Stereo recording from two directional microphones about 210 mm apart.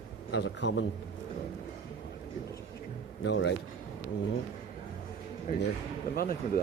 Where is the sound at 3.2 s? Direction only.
60° left (ahead or behind).